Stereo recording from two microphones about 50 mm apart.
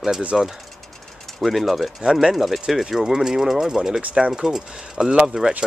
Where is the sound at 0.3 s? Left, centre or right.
Centre.